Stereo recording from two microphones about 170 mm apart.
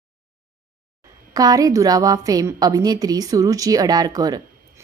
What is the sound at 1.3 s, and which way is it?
Speech, 20° right (ahead or behind).